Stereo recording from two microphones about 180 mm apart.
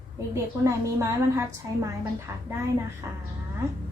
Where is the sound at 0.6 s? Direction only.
15° right (ahead or behind).